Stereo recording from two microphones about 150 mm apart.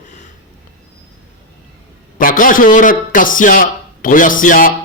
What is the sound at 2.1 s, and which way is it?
A man's voice, 65° left (ahead or behind).